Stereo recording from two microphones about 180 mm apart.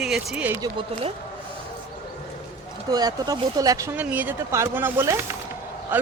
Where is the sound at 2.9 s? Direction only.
20° right (ahead or behind).